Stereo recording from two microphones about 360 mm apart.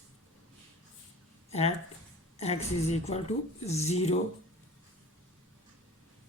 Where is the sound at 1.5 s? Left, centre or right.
Centre.